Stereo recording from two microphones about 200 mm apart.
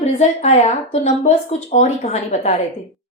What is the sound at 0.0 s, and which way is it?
Speech, 35° left (ahead or behind).